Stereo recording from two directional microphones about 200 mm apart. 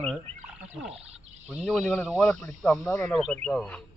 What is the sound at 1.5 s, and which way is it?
Speech, 5° right (ahead or behind).